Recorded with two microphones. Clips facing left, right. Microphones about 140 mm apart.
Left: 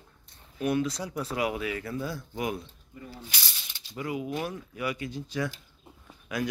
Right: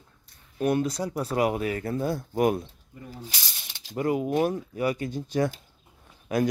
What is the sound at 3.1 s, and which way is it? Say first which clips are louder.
Speech: right 4 dB; 35° right (ahead or behind).